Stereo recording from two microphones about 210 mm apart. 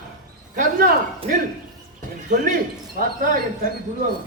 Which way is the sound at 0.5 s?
40° right (ahead or behind).